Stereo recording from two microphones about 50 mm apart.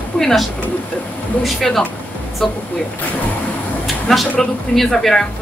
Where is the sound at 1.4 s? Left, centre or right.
Centre.